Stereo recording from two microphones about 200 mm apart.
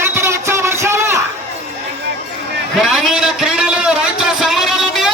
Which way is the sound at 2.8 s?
Centre (ahead or behind).